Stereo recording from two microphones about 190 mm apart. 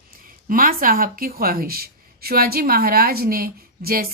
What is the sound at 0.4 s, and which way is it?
Speech, 45° right (ahead or behind).